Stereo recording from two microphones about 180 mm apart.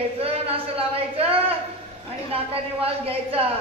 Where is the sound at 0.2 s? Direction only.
35° right (ahead or behind).